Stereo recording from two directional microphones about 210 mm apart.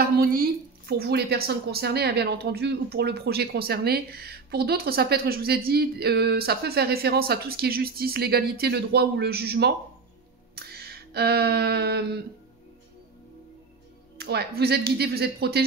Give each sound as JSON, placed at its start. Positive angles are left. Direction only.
{"t": 0.0, "sound": "a woman's voice", "side_deg": -45}
{"t": 10.5, "sound": "music", "side_deg": -50}
{"t": 14.1, "sound": "a woman's voice", "side_deg": -50}